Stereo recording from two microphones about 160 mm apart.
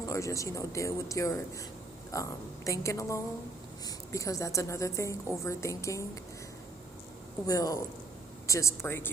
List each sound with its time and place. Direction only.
0.0 s a woman's voice: 20° left (ahead or behind)
7.4 s a woman's voice: 20° left (ahead or behind)